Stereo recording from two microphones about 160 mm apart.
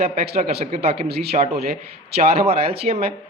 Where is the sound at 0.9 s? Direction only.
80° right.